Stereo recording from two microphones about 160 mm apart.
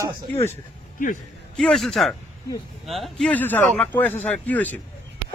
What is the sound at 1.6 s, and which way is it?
A man's voice, 5° left (ahead or behind).